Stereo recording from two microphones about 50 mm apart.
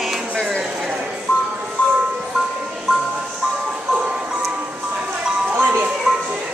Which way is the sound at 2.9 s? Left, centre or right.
Centre.